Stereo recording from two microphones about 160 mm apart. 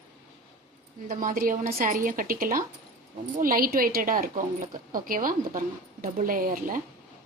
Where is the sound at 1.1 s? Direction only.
60° right (ahead or behind).